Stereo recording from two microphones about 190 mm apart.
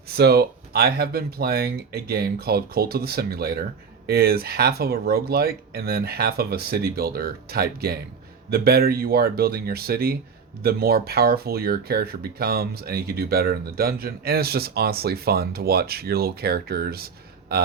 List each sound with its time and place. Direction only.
0.1 s speech: 55° right (ahead or behind)